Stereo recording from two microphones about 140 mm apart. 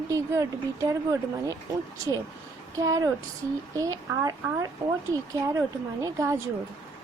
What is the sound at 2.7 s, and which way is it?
Speech, 25° right (ahead or behind).